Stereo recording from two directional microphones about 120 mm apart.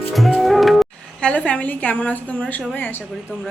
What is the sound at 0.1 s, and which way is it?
Music, centre (ahead or behind).